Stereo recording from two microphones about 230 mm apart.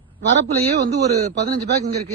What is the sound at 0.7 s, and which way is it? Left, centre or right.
Speech, right.